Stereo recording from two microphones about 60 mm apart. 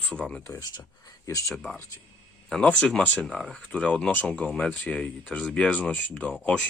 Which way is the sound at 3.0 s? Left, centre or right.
Left.